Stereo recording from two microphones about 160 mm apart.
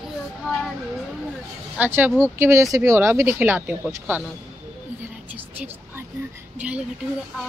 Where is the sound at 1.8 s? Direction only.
15° right (ahead or behind).